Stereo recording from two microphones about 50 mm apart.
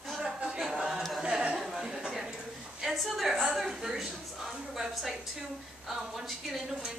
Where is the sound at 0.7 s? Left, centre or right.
Centre.